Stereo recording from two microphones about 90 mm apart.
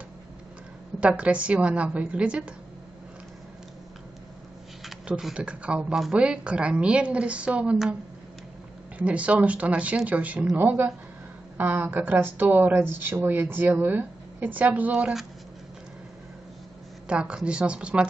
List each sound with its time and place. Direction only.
1.0 s speech: 15° right (ahead or behind)
4.8 s speech: 5° right (ahead or behind)
8.9 s a woman's voice: 15° right (ahead or behind)
17.1 s speech: 10° right (ahead or behind)